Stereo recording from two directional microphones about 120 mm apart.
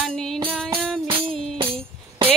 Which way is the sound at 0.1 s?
5° left (ahead or behind).